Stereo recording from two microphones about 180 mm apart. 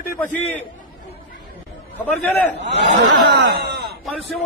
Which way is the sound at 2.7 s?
70° right (ahead or behind).